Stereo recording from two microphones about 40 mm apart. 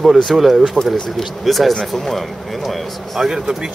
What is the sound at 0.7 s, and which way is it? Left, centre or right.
Speech, centre.